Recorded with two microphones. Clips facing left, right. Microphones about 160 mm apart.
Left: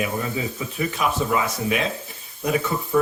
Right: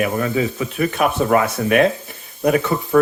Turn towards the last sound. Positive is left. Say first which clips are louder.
# right 5 dB
turn(degrees=-60)  # may be behind; listen again after turning